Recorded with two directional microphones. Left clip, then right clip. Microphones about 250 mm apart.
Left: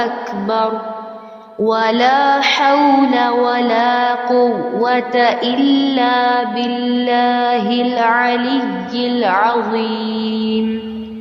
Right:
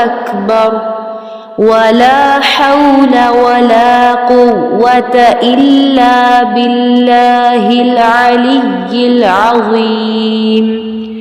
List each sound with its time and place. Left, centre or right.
0.0 s mantra: right